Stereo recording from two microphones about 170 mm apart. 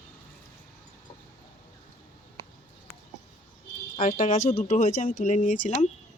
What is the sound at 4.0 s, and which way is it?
Speech, 50° left (ahead or behind).